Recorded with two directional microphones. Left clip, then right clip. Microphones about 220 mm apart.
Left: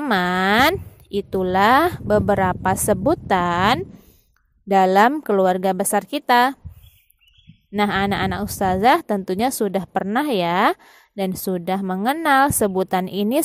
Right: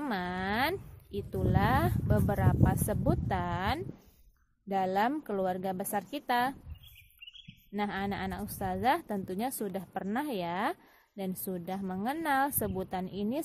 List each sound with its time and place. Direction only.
0.0 s a woman's voice: 45° left (ahead or behind)
7.7 s a woman's voice: 40° left (ahead or behind)